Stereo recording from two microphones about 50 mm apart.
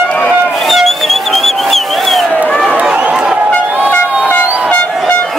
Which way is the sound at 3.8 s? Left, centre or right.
Left.